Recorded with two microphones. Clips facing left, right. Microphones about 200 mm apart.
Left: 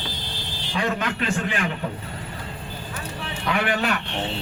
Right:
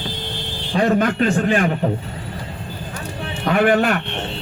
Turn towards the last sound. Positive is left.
turn(degrees=-50)  # may be behind; listen again after turning